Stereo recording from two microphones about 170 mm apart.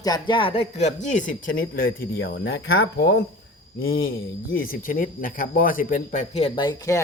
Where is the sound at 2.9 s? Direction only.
80° left.